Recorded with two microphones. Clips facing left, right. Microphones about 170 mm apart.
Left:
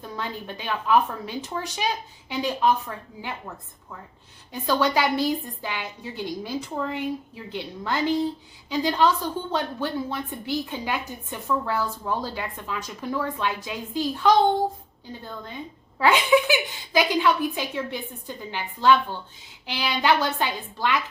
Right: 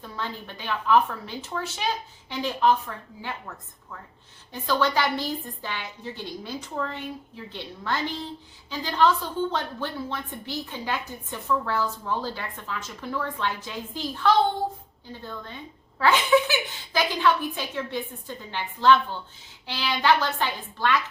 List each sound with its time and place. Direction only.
0.2 s a woman's voice: 15° left (ahead or behind)
4.6 s a woman's voice: 15° left (ahead or behind)
16.0 s a woman's voice: 15° left (ahead or behind)